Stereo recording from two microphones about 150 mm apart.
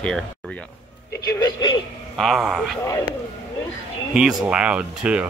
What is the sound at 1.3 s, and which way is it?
Speech, 25° left (ahead or behind).